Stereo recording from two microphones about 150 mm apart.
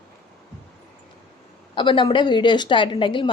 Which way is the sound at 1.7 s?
35° left (ahead or behind).